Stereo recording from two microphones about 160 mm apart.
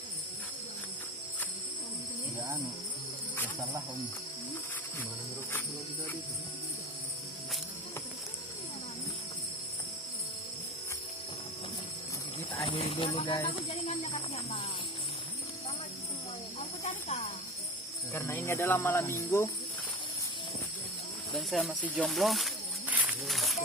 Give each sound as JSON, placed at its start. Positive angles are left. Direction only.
{"t": 12.6, "sound": "speech", "side_deg": 40}
{"t": 16.6, "sound": "hiss", "side_deg": 45}
{"t": 18.1, "sound": "speech", "side_deg": 15}
{"t": 21.3, "sound": "snake", "side_deg": 0}